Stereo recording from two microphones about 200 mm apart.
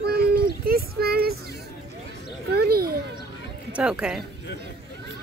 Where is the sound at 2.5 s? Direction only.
50° right (ahead or behind).